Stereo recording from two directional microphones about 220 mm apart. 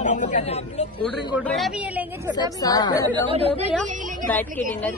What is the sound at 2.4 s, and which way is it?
Speech, 20° left (ahead or behind).